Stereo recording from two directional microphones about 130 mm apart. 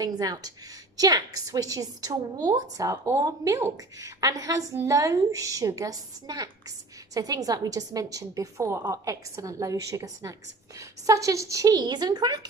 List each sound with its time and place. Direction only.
0.0 s a woman's voice: 30° right (ahead or behind)